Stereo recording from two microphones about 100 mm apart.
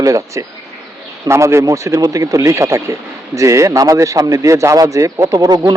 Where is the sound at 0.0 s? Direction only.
30° right (ahead or behind).